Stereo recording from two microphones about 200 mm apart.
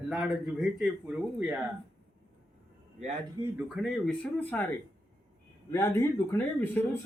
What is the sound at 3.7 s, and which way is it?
Speech, centre (ahead or behind).